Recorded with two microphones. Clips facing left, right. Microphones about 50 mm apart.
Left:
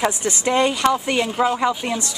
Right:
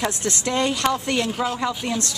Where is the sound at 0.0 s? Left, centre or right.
Centre.